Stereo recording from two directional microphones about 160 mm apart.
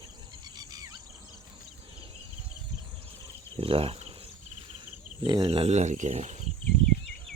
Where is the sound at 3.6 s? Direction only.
35° right (ahead or behind).